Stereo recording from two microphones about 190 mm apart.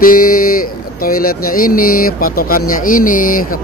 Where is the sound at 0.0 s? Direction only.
50° left (ahead or behind).